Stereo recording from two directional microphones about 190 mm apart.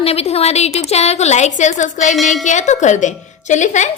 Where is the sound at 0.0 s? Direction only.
30° left (ahead or behind).